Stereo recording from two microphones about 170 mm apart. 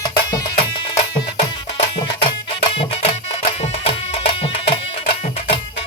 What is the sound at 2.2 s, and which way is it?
Music, 30° left (ahead or behind).